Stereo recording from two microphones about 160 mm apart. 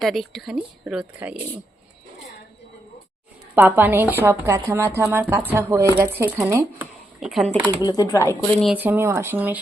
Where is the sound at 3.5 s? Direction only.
10° right (ahead or behind).